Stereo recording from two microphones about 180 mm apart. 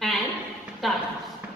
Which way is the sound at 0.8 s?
Centre (ahead or behind).